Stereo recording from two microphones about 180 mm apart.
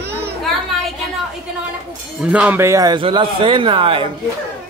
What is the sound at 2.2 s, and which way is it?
A man's voice, 5° right (ahead or behind).